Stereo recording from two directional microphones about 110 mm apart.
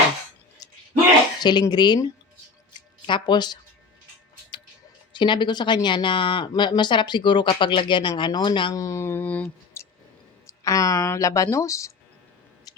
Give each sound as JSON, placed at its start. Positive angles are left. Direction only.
{"t": 0.6, "sound": "a sound", "side_deg": 35}
{"t": 1.4, "sound": "speech", "side_deg": 40}
{"t": 3.1, "sound": "speech", "side_deg": 45}
{"t": 5.1, "sound": "speech", "side_deg": 45}
{"t": 8.7, "sound": "speech", "side_deg": 30}
{"t": 10.4, "sound": "speech", "side_deg": 30}
{"t": 12.7, "sound": "a sound", "side_deg": 35}